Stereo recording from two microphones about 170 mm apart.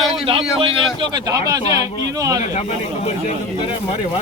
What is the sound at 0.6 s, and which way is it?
A man's voice, 35° right (ahead or behind).